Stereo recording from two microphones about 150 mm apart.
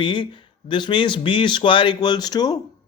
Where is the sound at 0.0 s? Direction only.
30° left (ahead or behind).